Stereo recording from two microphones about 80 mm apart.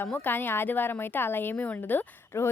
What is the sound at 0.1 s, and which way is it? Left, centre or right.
A woman's voice, left.